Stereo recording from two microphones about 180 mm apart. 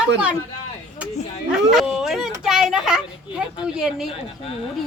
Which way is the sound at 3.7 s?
5° right (ahead or behind).